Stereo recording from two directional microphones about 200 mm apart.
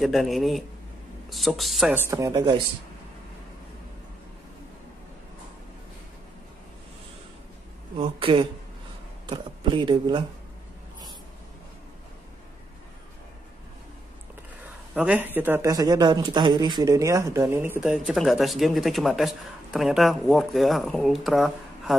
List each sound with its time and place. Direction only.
0.0 s speech: centre (ahead or behind)
2.0 s speech: 15° right (ahead or behind)
8.2 s speech: 25° right (ahead or behind)
15.0 s speech: 10° right (ahead or behind)